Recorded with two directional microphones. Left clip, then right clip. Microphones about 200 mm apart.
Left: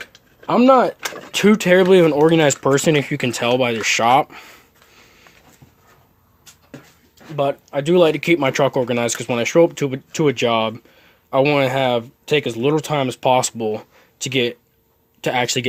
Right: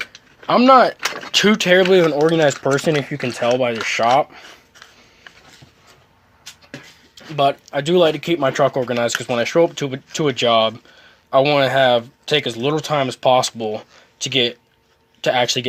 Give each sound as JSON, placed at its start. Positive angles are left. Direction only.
{"t": 0.4, "sound": "speech", "side_deg": 45}
{"t": 2.8, "sound": "speech", "side_deg": 50}
{"t": 7.3, "sound": "speech", "side_deg": 30}